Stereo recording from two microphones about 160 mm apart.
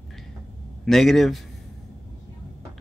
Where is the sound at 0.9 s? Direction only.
Centre (ahead or behind).